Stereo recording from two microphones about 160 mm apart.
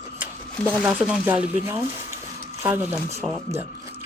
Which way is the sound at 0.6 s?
10° right (ahead or behind).